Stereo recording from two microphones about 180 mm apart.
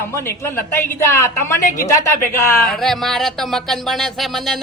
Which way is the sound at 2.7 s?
Centre (ahead or behind).